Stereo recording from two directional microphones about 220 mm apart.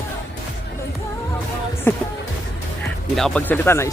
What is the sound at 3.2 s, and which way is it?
Speech, 5° left (ahead or behind).